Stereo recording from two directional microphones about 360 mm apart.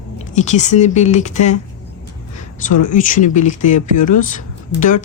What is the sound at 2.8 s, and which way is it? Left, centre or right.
Speech, left.